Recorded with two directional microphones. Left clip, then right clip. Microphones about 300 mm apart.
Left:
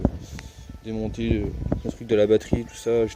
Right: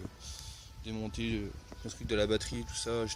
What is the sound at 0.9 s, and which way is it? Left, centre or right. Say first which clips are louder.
Speech: left 11 dB; right.